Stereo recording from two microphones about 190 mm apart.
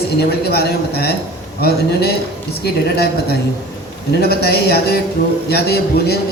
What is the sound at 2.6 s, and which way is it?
A woman's voice, 55° left (ahead or behind).